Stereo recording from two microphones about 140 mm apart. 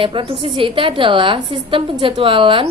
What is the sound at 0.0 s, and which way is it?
A woman's voice, 40° right (ahead or behind).